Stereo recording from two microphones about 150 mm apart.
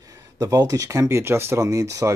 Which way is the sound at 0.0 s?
20° right (ahead or behind).